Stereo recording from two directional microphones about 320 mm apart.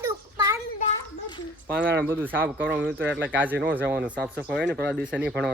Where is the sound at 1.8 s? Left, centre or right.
Centre.